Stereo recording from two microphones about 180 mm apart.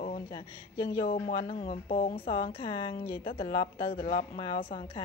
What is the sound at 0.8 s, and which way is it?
Speech, 75° left (ahead or behind).